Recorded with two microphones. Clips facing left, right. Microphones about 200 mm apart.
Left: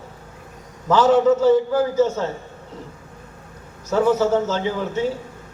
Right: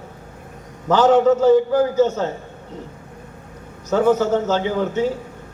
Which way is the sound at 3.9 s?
30° right (ahead or behind).